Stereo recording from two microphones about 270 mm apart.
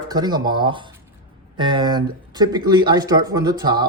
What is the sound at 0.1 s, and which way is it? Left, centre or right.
Speech, centre.